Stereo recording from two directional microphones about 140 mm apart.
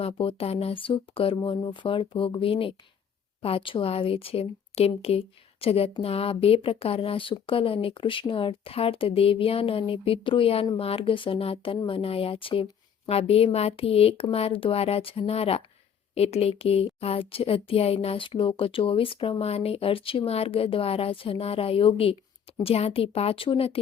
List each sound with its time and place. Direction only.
0.0 s speech: 40° left (ahead or behind)